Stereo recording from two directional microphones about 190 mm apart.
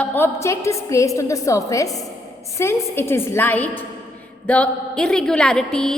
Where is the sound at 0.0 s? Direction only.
10° left (ahead or behind).